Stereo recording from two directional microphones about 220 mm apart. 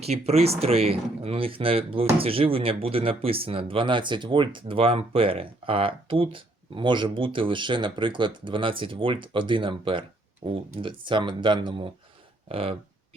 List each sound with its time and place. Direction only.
0.0 s speech: 30° right (ahead or behind)